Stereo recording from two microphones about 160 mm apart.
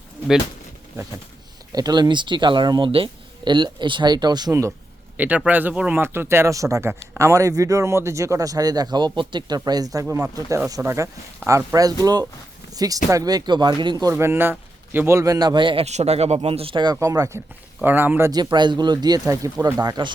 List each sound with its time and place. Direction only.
1.7 s a man's voice: 25° right (ahead or behind)
5.1 s a man's voice: 10° right (ahead or behind)
18.5 s a man's voice: 25° right (ahead or behind)